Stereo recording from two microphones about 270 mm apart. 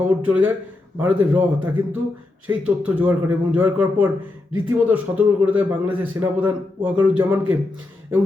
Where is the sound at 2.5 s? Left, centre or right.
Centre.